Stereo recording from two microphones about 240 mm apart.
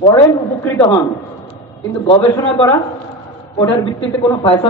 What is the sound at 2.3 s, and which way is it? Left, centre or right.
A man's voice, centre.